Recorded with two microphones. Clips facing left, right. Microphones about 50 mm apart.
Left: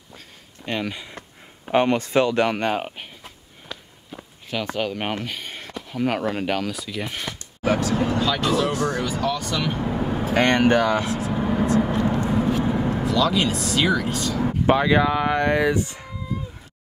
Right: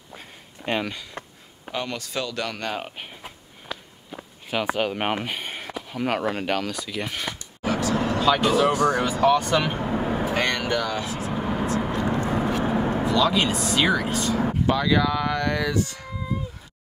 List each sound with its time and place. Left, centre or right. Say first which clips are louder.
0.1 s a sound: right 2 dB; centre
1.2 s a sound: right 3 dB; right
1.7 s speech: left 11 dB; left
3.2 s a sound: right 2 dB; centre
4.1 s speech: right 1 dB; centre
8.2 s speech: right 2 dB; centre
9.0 s speech: right 5 dB; right
9.8 s vehicle: even; centre
10.3 s speech: left 10 dB; left
11.3 s vehicle: left 3 dB; centre
12.0 s vehicle: left 2 dB; right
13.0 s speech: left 1 dB; centre
14.2 s speech: even; right
14.7 s speech: left 4 dB; left